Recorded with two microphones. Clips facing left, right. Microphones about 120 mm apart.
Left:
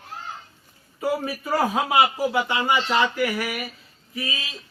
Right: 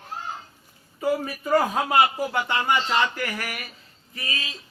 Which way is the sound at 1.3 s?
5° left (ahead or behind).